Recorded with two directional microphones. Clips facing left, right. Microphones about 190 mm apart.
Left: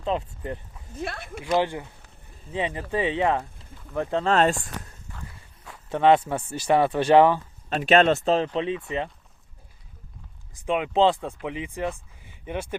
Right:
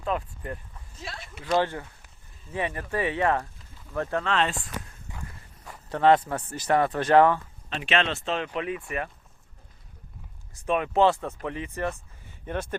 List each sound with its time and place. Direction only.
0.0 s speech: 25° left (ahead or behind)
0.9 s speech: 60° left (ahead or behind)
1.5 s speech: 15° left (ahead or behind)
4.2 s speech: 45° left (ahead or behind)
5.1 s dog: 15° right (ahead or behind)
5.9 s speech: 20° left (ahead or behind)
7.7 s speech: 40° left (ahead or behind)
8.5 s speech: 25° left (ahead or behind)
10.5 s speech: 15° left (ahead or behind)
12.2 s a sound: 15° left (ahead or behind)